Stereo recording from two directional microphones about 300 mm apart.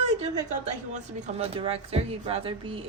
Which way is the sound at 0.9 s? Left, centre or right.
Right.